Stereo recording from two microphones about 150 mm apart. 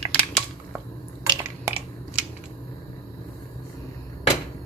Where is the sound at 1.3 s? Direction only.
20° right (ahead or behind).